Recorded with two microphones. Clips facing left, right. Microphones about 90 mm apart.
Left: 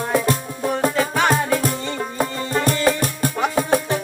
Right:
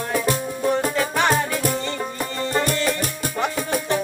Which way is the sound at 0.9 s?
5° left (ahead or behind).